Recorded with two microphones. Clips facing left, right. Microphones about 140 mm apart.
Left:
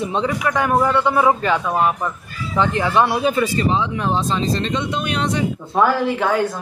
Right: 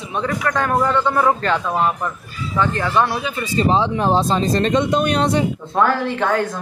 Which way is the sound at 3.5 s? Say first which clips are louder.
Right 2 dB; 30° right (ahead or behind).